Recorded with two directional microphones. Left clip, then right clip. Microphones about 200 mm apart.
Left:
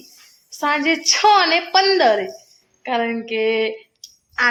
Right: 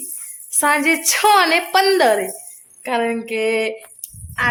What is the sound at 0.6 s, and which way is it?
A woman's voice, 10° right (ahead or behind).